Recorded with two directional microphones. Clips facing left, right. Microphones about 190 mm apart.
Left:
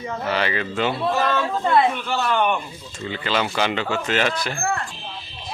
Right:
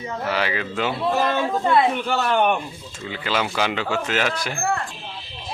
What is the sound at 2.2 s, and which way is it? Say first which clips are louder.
Speech: right 1 dB; 50° right (ahead or behind).